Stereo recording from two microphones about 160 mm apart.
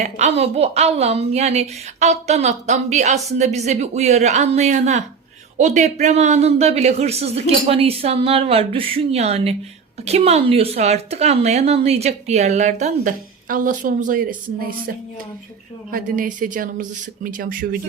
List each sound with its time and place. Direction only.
0.0 s a woman's voice: 45° right (ahead or behind)
15.9 s a woman's voice: 60° right (ahead or behind)